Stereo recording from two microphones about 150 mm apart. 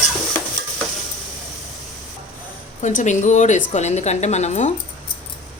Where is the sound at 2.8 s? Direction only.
50° left (ahead or behind).